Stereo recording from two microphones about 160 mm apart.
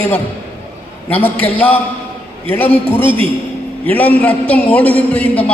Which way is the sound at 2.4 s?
15° left (ahead or behind).